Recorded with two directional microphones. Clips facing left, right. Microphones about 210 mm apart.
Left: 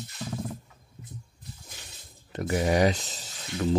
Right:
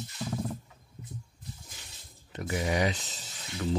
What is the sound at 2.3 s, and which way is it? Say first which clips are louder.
Speech: left 5 dB; 45° left (ahead or behind).